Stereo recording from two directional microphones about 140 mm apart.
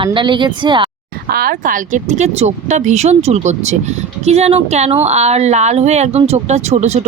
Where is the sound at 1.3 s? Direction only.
90° right.